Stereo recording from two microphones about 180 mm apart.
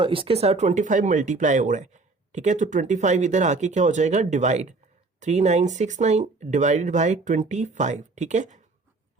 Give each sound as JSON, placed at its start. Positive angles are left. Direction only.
{"t": 0.0, "sound": "speech", "side_deg": -30}